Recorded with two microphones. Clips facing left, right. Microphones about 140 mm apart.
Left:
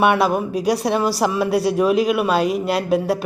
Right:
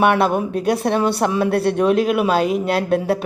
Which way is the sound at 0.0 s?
Centre (ahead or behind).